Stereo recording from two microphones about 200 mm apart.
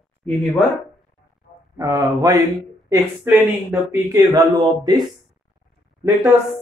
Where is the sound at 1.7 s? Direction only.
15° right (ahead or behind).